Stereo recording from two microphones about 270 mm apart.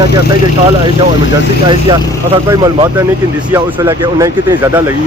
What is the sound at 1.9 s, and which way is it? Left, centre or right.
Speech, centre.